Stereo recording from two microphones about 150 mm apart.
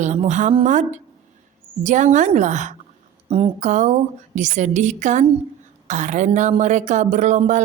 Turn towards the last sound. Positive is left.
turn(degrees=-50)  # may be behind; listen again after turning